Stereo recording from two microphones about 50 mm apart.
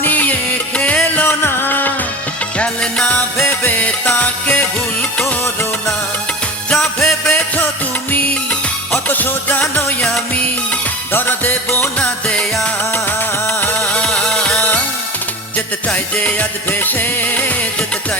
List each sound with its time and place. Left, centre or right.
0.0 s music: left
1.3 s music: left
2.6 s music: left
3.3 s music: left
3.7 s music: left
7.0 s music: left
8.9 s music: left
11.1 s music: left
11.9 s music: left
14.0 s music of bollywood: centre
15.9 s music: left